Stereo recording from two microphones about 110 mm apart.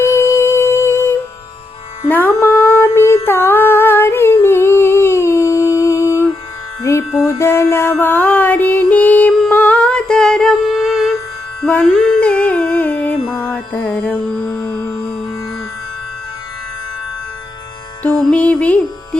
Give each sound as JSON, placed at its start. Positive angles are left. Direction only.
{"t": 0.0, "sound": "music", "side_deg": 25}
{"t": 3.2, "sound": "humming", "side_deg": 20}
{"t": 6.9, "sound": "music", "side_deg": 25}
{"t": 11.9, "sound": "humming", "side_deg": 5}
{"t": 13.3, "sound": "music", "side_deg": 20}
{"t": 18.0, "sound": "music", "side_deg": 10}